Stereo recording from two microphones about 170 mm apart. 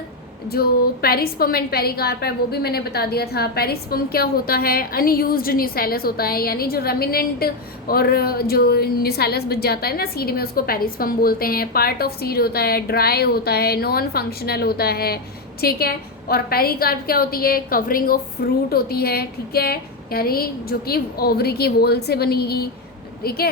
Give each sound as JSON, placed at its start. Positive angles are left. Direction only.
{"t": 0.4, "sound": "a woman's voice", "side_deg": 65}